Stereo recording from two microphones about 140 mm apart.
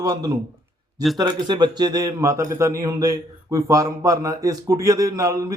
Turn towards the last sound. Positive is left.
turn(degrees=-25)  # may be behind; listen again after turning